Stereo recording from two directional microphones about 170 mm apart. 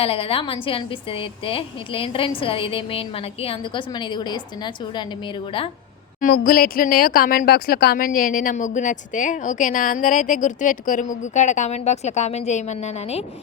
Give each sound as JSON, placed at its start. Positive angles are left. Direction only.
{"t": 0.0, "sound": "a woman's voice", "side_deg": 35}
{"t": 6.1, "sound": "speech", "side_deg": 55}